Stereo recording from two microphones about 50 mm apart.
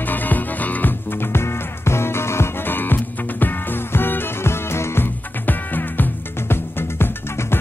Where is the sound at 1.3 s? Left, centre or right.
Left.